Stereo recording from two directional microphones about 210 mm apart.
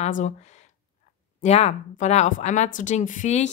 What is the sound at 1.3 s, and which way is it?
A woman's voice, 30° left (ahead or behind).